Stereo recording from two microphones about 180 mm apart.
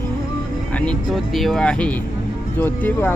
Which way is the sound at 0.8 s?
5° left (ahead or behind).